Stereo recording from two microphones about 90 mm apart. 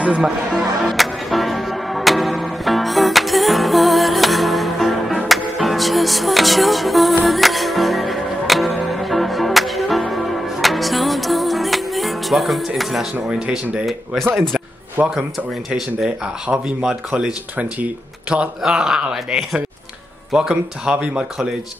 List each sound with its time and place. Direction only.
0.0 s music: 10° right (ahead or behind)
15.0 s speech: 15° right (ahead or behind)